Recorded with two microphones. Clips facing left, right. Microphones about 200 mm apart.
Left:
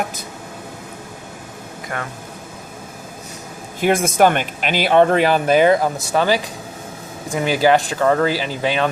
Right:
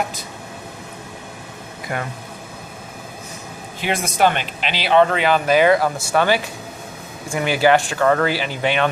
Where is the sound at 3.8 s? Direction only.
50° left (ahead or behind).